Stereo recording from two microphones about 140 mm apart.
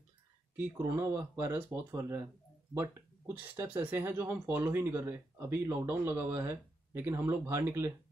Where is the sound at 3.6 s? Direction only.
15° right (ahead or behind).